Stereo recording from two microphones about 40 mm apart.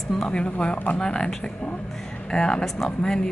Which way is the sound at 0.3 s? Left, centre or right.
Left.